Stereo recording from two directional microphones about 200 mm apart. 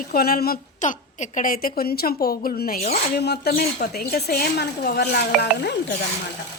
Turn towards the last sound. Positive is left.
turn(degrees=55)  # may be behind; listen again after turning